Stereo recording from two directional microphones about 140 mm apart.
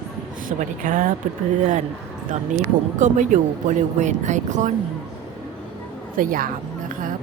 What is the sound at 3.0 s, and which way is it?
Speech, 60° right (ahead or behind).